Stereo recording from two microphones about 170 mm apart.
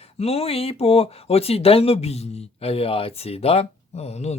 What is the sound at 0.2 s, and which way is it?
Speech, 35° left (ahead or behind).